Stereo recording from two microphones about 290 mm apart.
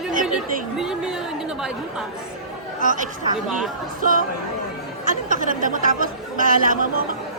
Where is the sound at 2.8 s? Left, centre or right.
Right.